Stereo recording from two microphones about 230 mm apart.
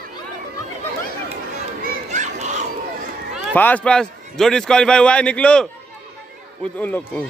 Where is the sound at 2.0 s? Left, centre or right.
Right.